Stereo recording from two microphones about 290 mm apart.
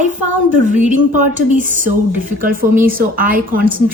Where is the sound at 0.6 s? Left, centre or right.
Right.